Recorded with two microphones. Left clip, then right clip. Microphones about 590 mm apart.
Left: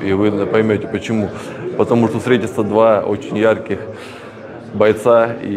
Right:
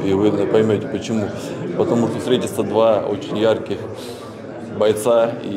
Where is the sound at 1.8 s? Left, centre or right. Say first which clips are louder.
Left 4 dB; left.